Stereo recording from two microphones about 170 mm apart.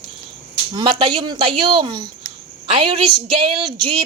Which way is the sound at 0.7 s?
30° right (ahead or behind).